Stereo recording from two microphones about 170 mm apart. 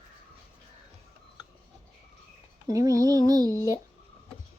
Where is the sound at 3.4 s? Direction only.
20° left (ahead or behind).